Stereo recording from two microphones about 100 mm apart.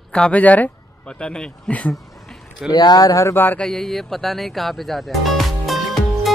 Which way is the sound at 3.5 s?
5° left (ahead or behind).